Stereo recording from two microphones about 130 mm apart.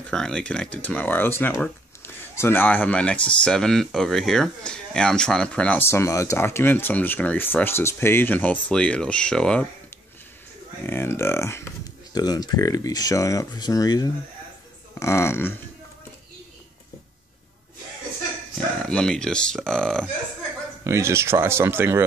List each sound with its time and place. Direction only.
0.1 s speech: 5° left (ahead or behind)
10.9 s speech: 15° left (ahead or behind)
18.9 s speech: 5° left (ahead or behind)
20.8 s speech: 20° right (ahead or behind)